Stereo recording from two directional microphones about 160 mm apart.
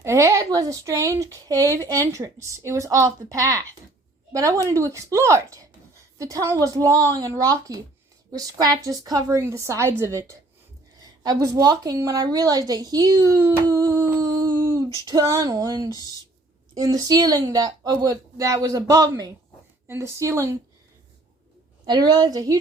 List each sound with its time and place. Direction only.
0.0 s a woman's voice: 20° right (ahead or behind)
21.8 s a woman's voice: 25° right (ahead or behind)